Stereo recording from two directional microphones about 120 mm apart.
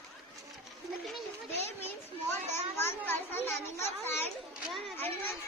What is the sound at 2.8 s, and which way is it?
Children playing, 20° left (ahead or behind).